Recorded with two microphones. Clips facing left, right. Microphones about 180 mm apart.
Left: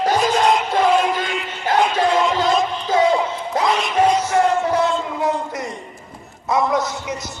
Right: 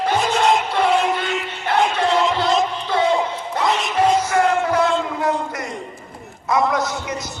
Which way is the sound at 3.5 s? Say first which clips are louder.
Left 1 dB; 40° left (ahead or behind).